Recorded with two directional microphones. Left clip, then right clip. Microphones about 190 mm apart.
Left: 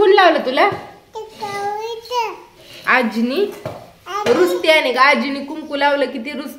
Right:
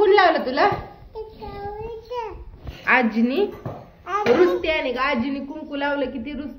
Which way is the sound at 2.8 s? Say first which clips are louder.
Left 3 dB; 25° left (ahead or behind).